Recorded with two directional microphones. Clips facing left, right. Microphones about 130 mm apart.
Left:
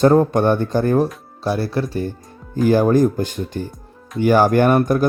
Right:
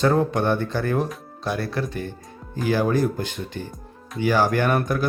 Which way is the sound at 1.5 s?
30° left (ahead or behind).